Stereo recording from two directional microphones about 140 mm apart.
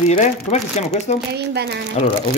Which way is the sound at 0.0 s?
55° left (ahead or behind).